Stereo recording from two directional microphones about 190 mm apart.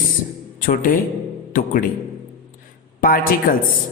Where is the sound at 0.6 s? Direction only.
45° left (ahead or behind).